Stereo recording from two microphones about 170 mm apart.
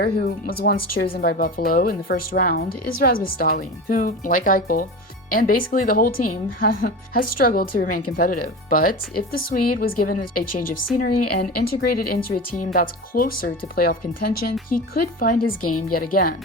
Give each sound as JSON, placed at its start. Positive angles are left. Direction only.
{"t": 0.0, "sound": "speech", "side_deg": 65}